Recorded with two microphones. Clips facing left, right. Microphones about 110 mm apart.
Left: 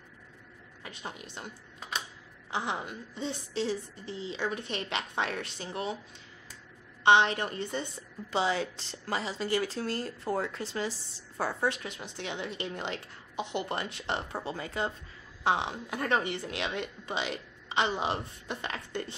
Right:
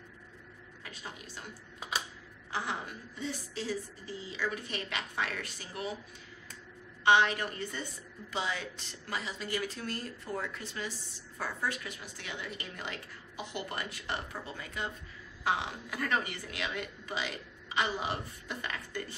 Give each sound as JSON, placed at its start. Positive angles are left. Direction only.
{"t": 0.8, "sound": "a woman's voice", "side_deg": 20}
{"t": 1.8, "sound": "a sound", "side_deg": -5}
{"t": 2.5, "sound": "a woman's voice", "side_deg": 20}
{"t": 7.0, "sound": "a woman's voice", "side_deg": 25}